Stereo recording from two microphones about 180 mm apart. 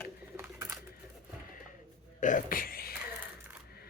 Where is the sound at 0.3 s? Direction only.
15° right (ahead or behind).